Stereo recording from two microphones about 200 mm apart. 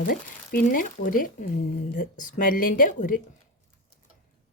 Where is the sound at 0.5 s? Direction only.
45° left (ahead or behind).